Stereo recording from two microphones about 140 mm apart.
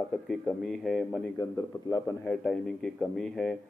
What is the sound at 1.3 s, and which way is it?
Speech, 25° left (ahead or behind).